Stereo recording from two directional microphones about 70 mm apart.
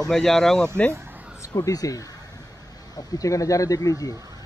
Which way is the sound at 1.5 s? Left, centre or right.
Left.